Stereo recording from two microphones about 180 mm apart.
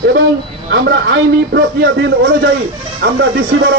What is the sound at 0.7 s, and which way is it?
Speech, 70° right (ahead or behind).